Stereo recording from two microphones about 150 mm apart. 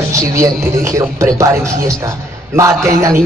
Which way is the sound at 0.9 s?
20° right (ahead or behind).